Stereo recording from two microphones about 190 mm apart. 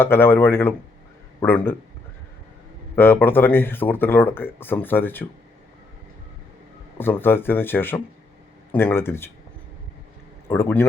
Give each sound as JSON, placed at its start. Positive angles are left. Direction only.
{"t": 0.0, "sound": "speech", "side_deg": 10}
{"t": 2.9, "sound": "speech", "side_deg": 10}
{"t": 7.0, "sound": "speech", "side_deg": 10}
{"t": 10.5, "sound": "speech", "side_deg": 10}